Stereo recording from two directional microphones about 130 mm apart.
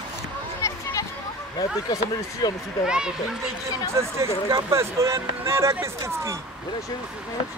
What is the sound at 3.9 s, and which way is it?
Speech, 20° right (ahead or behind).